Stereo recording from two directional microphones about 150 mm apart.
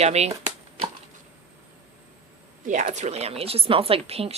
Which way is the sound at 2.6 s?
50° right (ahead or behind).